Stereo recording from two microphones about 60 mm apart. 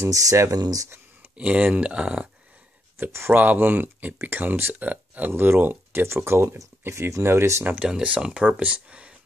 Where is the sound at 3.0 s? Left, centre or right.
Right.